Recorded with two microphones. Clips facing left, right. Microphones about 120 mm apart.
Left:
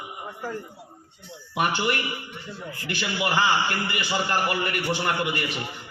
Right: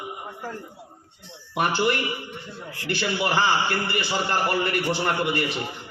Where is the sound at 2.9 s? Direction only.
30° right (ahead or behind).